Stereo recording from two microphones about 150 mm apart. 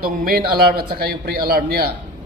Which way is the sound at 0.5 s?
90° right.